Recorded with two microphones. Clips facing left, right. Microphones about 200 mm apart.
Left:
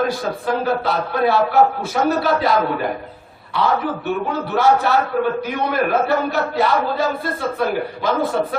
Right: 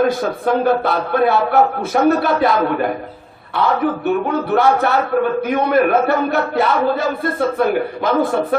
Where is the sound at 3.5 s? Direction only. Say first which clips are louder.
Right 2 dB; 55° right (ahead or behind).